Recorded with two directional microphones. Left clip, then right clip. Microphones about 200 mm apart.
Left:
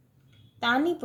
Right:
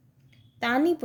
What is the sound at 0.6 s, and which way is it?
Speech, 40° right (ahead or behind).